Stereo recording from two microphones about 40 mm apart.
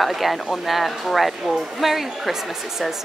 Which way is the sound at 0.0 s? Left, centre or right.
Centre.